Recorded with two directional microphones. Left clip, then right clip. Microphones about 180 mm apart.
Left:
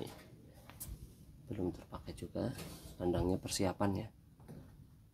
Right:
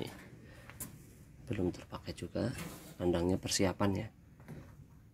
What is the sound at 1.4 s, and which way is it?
Speech, 15° right (ahead or behind).